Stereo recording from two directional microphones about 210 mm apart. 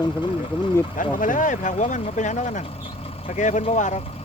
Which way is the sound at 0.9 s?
40° left (ahead or behind).